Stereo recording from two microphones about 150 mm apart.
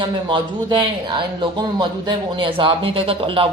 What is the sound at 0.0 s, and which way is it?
Speech, 30° right (ahead or behind).